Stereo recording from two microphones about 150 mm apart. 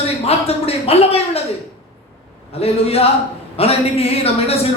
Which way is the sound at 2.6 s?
40° left (ahead or behind).